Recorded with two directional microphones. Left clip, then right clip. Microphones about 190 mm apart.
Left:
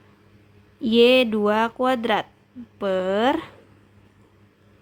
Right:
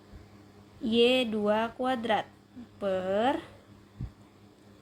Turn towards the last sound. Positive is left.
turn(degrees=40)  # may be behind; listen again after turning